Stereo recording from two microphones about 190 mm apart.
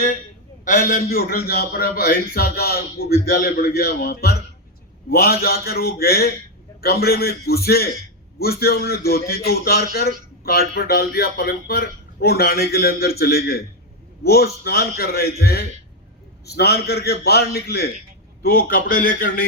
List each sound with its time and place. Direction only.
0.6 s a man's voice: 45° left (ahead or behind)